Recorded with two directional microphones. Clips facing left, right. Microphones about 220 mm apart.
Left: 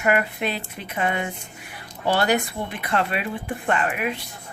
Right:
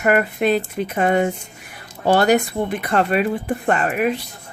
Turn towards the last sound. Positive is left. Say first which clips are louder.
# right 5 dB
turn(degrees=-40)  # may be behind; listen again after turning